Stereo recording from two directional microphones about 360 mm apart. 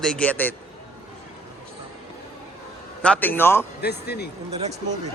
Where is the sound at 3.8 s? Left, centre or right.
Left.